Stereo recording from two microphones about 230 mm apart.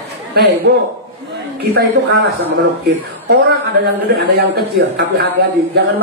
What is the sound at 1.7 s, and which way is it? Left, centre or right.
Speech, right.